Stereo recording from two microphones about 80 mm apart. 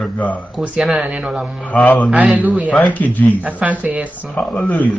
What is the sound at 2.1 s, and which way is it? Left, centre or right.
Speech, centre.